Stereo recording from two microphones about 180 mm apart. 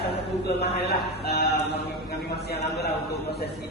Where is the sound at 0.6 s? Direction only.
60° left (ahead or behind).